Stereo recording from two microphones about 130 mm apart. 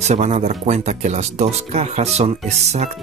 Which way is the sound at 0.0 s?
60° right (ahead or behind).